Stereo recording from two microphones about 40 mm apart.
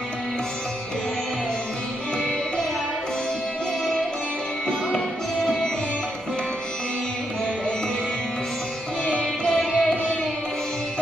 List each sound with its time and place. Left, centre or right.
5.4 s music: centre
9.0 s music: left